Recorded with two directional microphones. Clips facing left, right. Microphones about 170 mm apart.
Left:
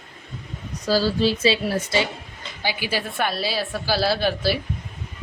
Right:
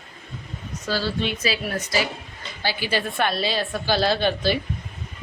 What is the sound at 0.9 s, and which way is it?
Speech, 40° left (ahead or behind).